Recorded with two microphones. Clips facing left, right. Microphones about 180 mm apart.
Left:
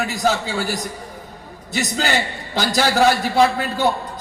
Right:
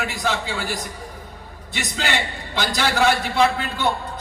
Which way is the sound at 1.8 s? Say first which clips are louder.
Left 4 dB; 40° left (ahead or behind).